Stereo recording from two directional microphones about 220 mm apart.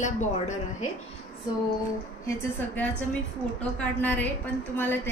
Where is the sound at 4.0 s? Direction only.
10° left (ahead or behind).